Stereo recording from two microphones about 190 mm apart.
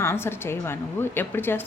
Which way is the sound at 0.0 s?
10° left (ahead or behind).